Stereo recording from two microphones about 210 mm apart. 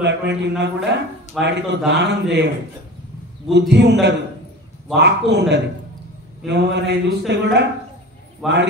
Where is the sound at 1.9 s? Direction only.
55° right (ahead or behind).